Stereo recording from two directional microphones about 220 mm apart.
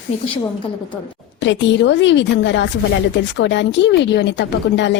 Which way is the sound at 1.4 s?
55° left (ahead or behind).